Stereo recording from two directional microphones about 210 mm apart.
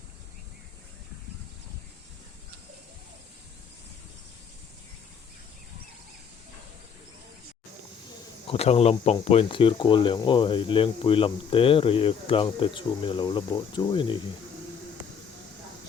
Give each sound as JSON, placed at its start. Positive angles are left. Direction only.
{"t": 8.4, "sound": "speech", "side_deg": 30}